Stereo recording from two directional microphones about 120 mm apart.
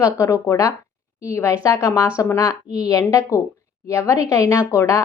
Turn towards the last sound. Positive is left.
turn(degrees=25)  # may be behind; listen again after turning